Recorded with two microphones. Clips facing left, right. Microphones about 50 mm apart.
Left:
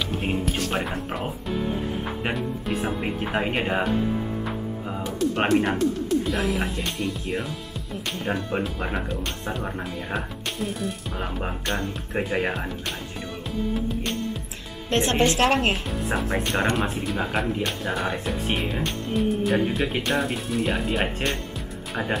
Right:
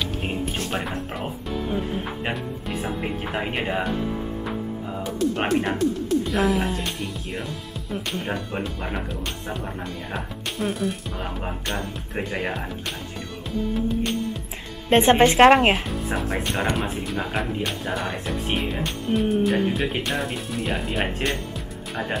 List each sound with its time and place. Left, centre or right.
0.7 s speech: centre
5.0 s speech: centre
13.5 s music: centre
14.9 s a woman's voice: right
16.1 s speech: centre